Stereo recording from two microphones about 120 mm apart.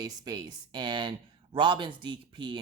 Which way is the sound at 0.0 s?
30° right (ahead or behind).